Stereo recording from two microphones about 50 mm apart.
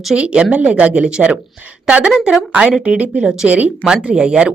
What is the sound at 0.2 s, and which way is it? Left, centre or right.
Speech, right.